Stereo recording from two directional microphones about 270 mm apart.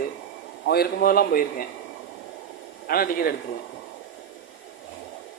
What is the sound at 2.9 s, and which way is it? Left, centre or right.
Speech, left.